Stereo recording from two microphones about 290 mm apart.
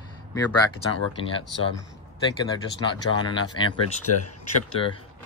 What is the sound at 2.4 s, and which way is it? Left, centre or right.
Speech, centre.